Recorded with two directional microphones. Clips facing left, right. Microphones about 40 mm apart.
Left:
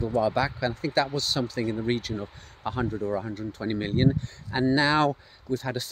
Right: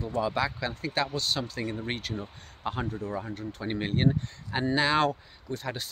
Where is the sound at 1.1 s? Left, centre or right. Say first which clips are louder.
Left 2 dB; right.